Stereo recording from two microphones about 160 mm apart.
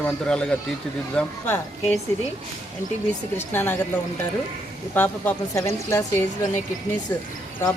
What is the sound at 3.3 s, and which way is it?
Speech, 15° left (ahead or behind).